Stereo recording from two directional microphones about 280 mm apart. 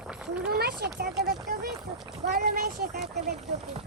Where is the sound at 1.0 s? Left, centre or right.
Right.